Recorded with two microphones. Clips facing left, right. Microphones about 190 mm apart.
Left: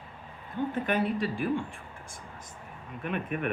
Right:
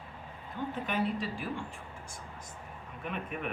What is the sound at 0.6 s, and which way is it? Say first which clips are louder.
Speech: left 5 dB; 50° left (ahead or behind).